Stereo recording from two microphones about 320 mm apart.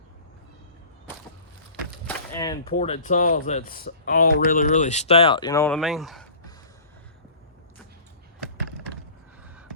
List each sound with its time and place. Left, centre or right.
2.0 s speech: centre